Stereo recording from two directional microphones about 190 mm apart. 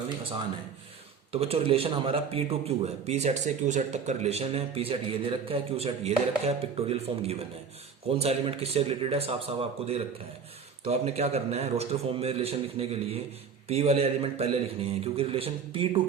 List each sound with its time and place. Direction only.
1.3 s a man's voice: 30° right (ahead or behind)